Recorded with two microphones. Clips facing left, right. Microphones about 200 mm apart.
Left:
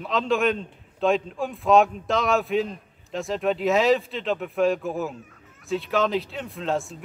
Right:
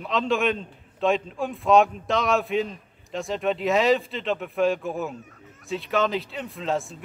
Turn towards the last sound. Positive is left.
turn(degrees=0)  # may be behind; listen again after turning